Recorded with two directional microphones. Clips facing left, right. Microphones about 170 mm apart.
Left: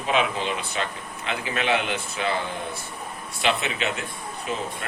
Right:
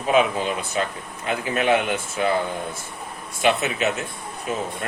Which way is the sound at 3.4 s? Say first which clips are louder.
Right 4 dB; 45° right (ahead or behind).